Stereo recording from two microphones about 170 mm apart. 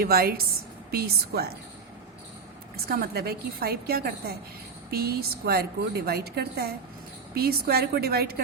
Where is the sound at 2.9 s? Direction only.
65° right (ahead or behind).